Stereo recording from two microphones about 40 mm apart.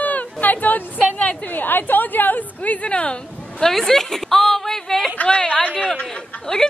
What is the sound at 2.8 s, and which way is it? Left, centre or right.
Speech, left.